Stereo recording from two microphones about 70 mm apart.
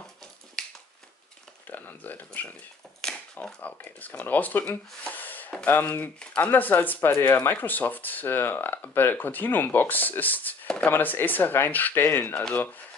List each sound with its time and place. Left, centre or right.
1.7 s speech: left
3.0 s a sound: centre
3.3 s speech: left